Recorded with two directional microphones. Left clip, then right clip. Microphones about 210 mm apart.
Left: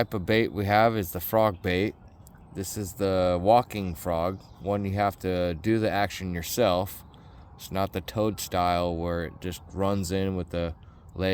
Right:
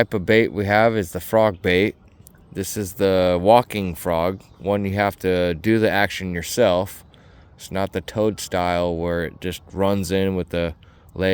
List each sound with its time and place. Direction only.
0.0 s speech: 30° right (ahead or behind)